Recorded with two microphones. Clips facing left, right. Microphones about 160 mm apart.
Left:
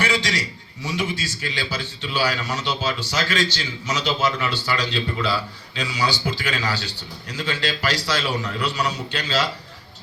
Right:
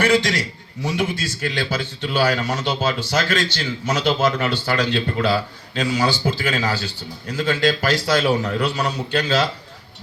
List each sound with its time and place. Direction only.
0.0 s a man's voice: 55° right (ahead or behind)